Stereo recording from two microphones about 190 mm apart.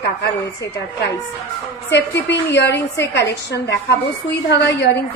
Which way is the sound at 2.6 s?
65° left (ahead or behind).